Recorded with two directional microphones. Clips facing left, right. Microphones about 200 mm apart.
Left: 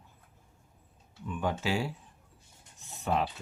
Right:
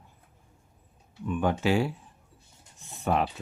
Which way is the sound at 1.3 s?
60° right (ahead or behind).